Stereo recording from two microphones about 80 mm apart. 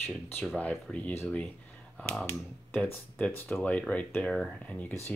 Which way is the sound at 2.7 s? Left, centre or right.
Centre.